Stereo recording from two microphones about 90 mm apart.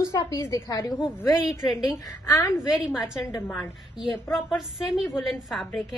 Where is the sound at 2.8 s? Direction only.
5° right (ahead or behind).